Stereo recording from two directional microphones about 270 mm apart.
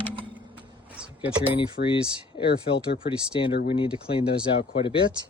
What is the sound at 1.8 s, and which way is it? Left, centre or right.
Speech, left.